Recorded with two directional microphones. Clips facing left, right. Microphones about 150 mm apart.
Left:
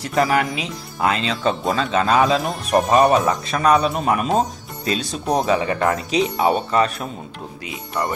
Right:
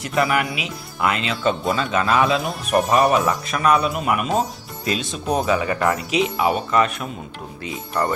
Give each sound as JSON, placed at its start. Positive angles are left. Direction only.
{"t": 0.2, "sound": "speech", "side_deg": 35}
{"t": 5.4, "sound": "speech", "side_deg": 25}